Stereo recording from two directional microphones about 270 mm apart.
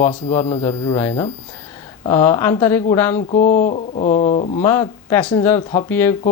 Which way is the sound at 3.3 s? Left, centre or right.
Left.